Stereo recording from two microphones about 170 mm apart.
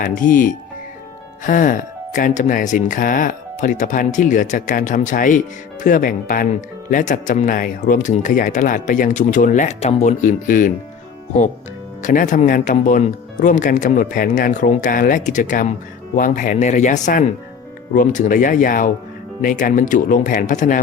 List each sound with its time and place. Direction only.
0.0 s speech: 50° left (ahead or behind)
12.0 s speech: 50° left (ahead or behind)